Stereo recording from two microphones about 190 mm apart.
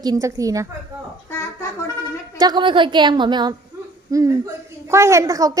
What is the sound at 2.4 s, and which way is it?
A woman's voice, 20° right (ahead or behind).